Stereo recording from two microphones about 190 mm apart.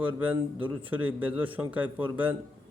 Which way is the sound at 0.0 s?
25° right (ahead or behind).